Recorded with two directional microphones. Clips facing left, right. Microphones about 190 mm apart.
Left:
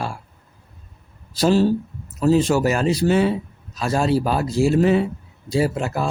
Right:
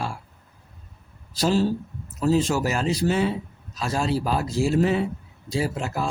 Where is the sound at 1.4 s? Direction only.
70° left (ahead or behind).